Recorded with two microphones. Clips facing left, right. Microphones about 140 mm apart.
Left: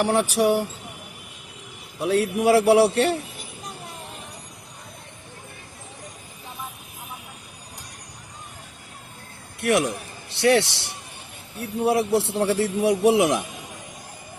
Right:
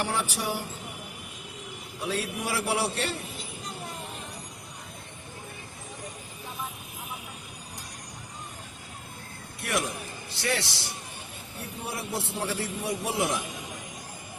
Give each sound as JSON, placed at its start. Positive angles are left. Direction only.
{"t": 0.0, "sound": "a man's voice", "side_deg": 70}
{"t": 2.0, "sound": "a man's voice", "side_deg": 65}
{"t": 9.6, "sound": "a man's voice", "side_deg": 70}